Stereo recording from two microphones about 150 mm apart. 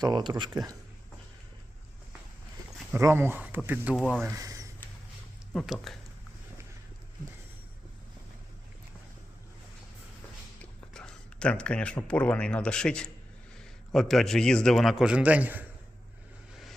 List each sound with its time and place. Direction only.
0.0 s speech: 30° right (ahead or behind)
2.9 s speech: 15° right (ahead or behind)
3.9 s a man's voice: 5° left (ahead or behind)
4.3 s a sound: 20° right (ahead or behind)
5.5 s a man's voice: centre (ahead or behind)
10.6 s a man's voice: 5° left (ahead or behind); by 15.6 s 10° right (ahead or behind)